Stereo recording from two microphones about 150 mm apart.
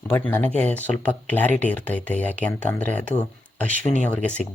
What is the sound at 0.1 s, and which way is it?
Speech, 15° left (ahead or behind).